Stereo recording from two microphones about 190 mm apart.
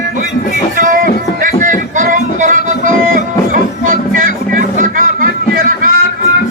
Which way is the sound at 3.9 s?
45° right (ahead or behind).